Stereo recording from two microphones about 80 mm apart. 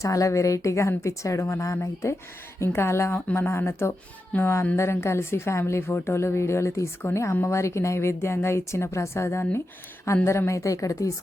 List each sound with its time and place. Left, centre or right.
0.0 s speech: left
4.3 s speech: centre
4.8 s speech: left